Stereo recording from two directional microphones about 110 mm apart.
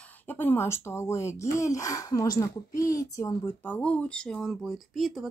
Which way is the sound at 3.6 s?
15° left (ahead or behind).